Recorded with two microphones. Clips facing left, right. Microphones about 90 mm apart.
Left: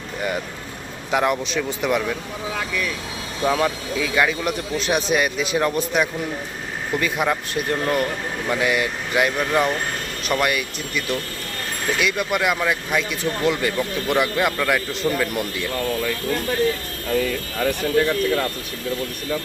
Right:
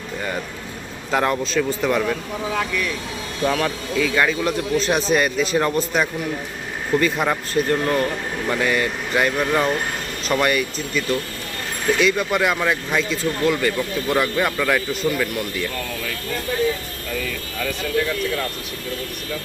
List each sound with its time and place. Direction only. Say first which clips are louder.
1.1 s speech: right 1 dB; 10° left (ahead or behind)
3.4 s speech: left 1 dB; 15° left (ahead or behind)
6.9 s speech: right 2 dB; 5° left (ahead or behind)
13.4 s speech: right 1 dB; 20° left (ahead or behind)
14.5 s speech: right 1 dB; centre (ahead or behind)
15.0 s speech: left 1 dB; 20° left (ahead or behind)